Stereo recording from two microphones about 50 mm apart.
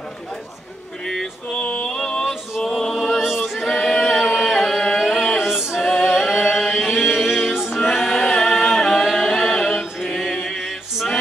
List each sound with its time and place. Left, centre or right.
1.0 s male singing: centre
1.6 s music: left
2.9 s chant: centre
4.1 s singing: centre
5.0 s a sound: centre
5.4 s music: centre
6.4 s chant: centre
6.8 s chant: centre
7.5 s music: centre
7.9 s a capella: centre
8.4 s singing: centre
9.0 s music: centre
9.8 s chant: centre
10.4 s male singing: centre